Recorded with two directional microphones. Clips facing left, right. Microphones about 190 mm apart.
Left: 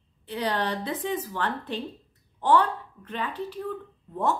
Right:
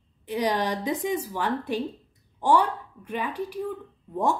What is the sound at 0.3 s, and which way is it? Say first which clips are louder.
A woman's voice: right 3 dB; 15° right (ahead or behind).